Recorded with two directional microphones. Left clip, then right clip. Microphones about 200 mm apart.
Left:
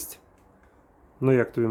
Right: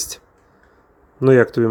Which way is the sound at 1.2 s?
20° right (ahead or behind).